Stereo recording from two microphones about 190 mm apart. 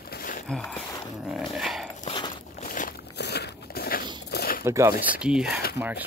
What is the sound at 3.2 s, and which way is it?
Biting, 60° left (ahead or behind).